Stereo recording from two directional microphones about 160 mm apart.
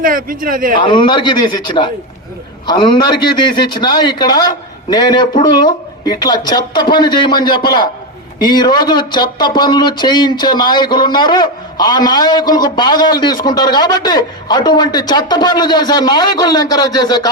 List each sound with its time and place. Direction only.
0.0 s speech: 60° right (ahead or behind)
0.8 s speech: 30° left (ahead or behind)